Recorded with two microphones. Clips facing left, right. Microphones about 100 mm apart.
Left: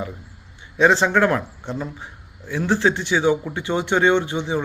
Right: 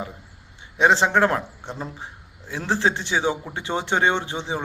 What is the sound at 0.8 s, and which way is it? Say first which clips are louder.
Speech: left 1 dB; 20° right (ahead or behind).